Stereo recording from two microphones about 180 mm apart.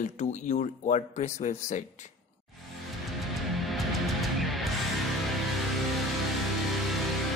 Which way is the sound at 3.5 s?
Centre (ahead or behind).